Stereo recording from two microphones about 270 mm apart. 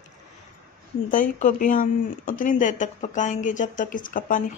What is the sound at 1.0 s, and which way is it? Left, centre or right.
Speech, left.